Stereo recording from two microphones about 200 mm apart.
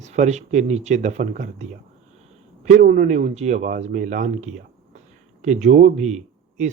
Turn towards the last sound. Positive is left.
turn(degrees=-35)  # may be behind; listen again after turning